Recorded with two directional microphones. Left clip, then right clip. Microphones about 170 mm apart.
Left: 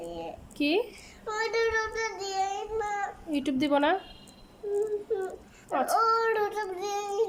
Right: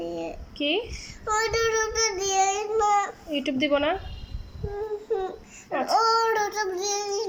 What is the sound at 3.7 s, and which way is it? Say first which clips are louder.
Child singing: even; 15° left (ahead or behind).